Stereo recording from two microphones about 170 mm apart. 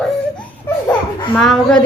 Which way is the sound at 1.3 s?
5° left (ahead or behind).